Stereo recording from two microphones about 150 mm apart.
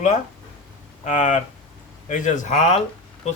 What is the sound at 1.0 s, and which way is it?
A man's voice, 55° left (ahead or behind).